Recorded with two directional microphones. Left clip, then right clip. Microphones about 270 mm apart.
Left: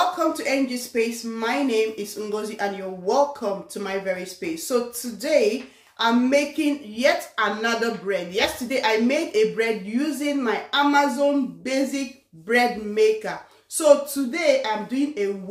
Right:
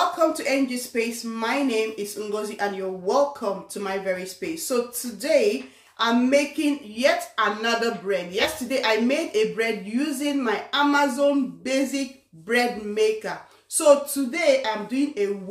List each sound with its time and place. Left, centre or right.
0.2 s speech: centre